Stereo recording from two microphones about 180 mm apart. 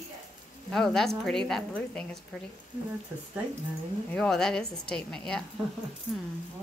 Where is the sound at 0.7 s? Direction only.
Centre (ahead or behind).